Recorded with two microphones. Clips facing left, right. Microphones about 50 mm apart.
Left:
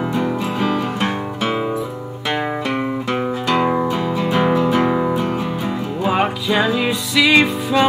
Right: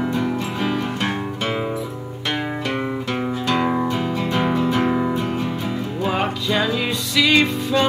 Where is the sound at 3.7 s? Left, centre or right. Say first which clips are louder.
Left 3 dB; centre.